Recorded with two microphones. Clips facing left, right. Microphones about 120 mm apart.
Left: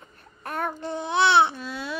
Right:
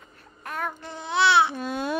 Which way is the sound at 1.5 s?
50° right (ahead or behind).